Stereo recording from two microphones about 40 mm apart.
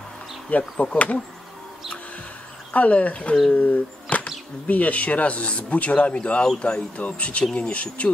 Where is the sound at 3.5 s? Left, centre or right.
Left.